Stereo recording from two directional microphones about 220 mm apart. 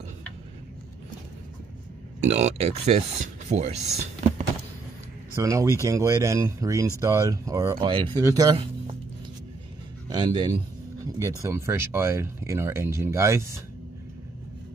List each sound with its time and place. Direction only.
2.2 s speech: 30° right (ahead or behind)
5.3 s speech: 15° right (ahead or behind)
10.0 s speech: 20° right (ahead or behind)